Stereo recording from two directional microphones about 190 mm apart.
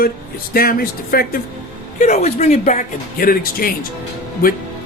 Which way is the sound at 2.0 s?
35° left (ahead or behind).